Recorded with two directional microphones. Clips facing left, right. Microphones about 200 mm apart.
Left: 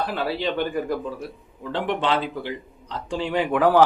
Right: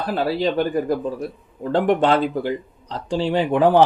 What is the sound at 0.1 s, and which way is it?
Speech, 40° right (ahead or behind).